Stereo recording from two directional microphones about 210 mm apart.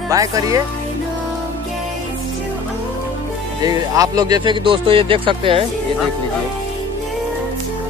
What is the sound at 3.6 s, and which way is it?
Speech, 20° right (ahead or behind).